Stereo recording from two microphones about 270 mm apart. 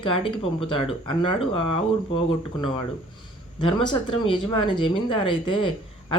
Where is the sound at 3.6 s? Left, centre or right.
Centre.